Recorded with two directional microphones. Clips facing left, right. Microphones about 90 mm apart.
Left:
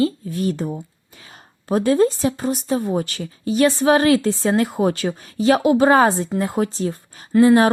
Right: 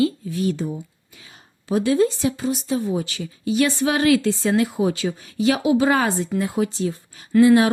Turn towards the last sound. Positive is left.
turn(degrees=35)  # may be behind; listen again after turning